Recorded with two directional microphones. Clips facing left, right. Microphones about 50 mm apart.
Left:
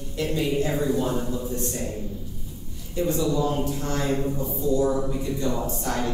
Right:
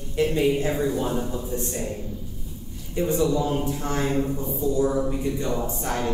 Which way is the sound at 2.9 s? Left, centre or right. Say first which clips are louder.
Right 1 dB; right.